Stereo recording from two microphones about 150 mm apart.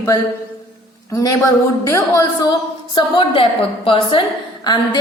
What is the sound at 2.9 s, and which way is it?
A woman's voice, 35° left (ahead or behind).